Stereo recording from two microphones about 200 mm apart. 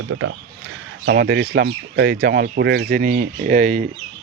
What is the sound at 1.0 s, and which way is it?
Speech, 55° right (ahead or behind).